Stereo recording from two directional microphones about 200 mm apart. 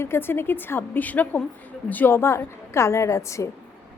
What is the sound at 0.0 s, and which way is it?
A woman's voice, 10° left (ahead or behind).